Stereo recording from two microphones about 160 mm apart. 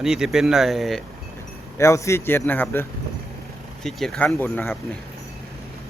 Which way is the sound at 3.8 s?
Centre (ahead or behind).